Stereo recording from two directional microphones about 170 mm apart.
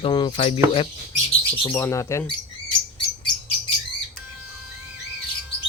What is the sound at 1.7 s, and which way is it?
Speech, 15° left (ahead or behind).